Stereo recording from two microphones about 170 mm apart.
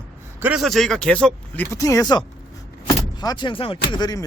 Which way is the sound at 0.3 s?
10° right (ahead or behind).